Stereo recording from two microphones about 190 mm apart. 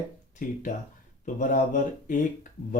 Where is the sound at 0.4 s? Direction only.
45° left (ahead or behind).